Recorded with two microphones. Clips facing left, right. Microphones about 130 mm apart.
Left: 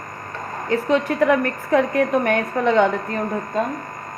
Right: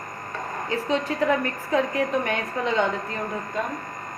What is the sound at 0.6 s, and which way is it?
A woman's voice, 60° left (ahead or behind).